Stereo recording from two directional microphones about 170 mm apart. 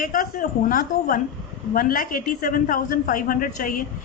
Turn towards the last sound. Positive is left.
turn(degrees=55)  # may be behind; listen again after turning